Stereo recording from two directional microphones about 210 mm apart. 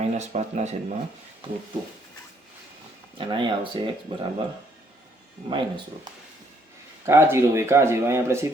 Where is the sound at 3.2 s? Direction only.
25° right (ahead or behind).